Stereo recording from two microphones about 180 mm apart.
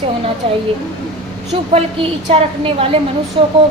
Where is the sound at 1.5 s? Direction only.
35° right (ahead or behind).